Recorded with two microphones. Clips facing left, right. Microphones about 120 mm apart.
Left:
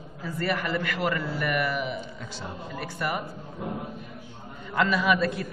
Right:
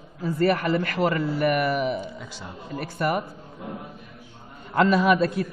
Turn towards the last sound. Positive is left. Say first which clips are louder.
# right 4 dB
turn(degrees=-35)  # may be behind; listen again after turning